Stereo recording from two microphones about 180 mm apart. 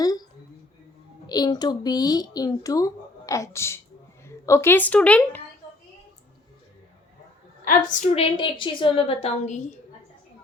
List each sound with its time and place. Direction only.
0.0 s a sound: 20° left (ahead or behind)
1.3 s a woman's voice: 20° left (ahead or behind); by 5.4 s 5° left (ahead or behind)
7.6 s a woman's voice: 50° left (ahead or behind)